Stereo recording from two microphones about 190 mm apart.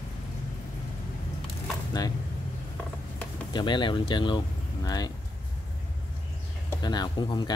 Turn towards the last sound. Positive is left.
turn(degrees=20)  # may be behind; listen again after turning